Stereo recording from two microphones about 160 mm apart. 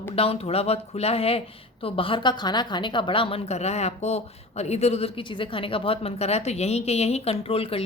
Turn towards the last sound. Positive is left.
turn(degrees=35)  # may be behind; listen again after turning